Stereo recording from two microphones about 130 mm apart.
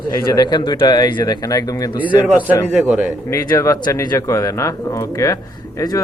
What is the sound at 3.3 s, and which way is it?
Speech, 25° left (ahead or behind).